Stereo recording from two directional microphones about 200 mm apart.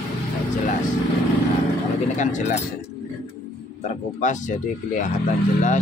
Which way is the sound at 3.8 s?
35° left (ahead or behind).